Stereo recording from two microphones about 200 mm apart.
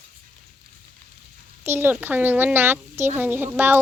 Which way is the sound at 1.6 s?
10° right (ahead or behind).